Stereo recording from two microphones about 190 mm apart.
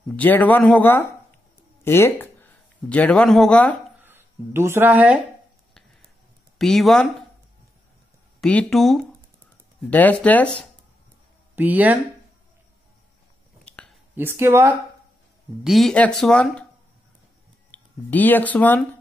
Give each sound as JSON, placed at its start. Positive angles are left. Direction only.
{"t": 0.1, "sound": "speech", "side_deg": 10}
{"t": 4.0, "sound": "speech", "side_deg": -10}
{"t": 6.6, "sound": "speech", "side_deg": 0}
{"t": 8.4, "sound": "speech", "side_deg": 5}
{"t": 11.5, "sound": "speech", "side_deg": -10}
{"t": 14.1, "sound": "speech", "side_deg": -10}
{"t": 15.6, "sound": "speech", "side_deg": 0}
{"t": 17.6, "sound": "speech", "side_deg": 10}